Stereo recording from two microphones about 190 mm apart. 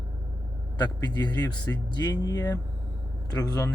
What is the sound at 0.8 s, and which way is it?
Speech, 20° left (ahead or behind).